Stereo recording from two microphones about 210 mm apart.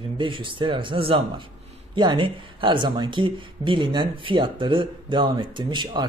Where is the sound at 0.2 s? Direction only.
25° right (ahead or behind).